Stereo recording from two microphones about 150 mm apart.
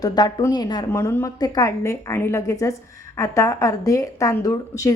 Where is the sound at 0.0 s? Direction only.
25° left (ahead or behind).